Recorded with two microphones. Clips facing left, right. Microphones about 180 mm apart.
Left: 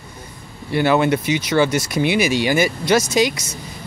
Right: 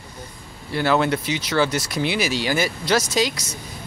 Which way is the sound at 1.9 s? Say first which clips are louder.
Left 5 dB; 55° left (ahead or behind).